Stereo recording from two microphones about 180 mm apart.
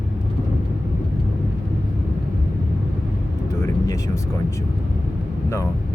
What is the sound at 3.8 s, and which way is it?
Speech, 20° left (ahead or behind).